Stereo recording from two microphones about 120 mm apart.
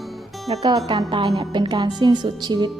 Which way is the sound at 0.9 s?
40° right (ahead or behind).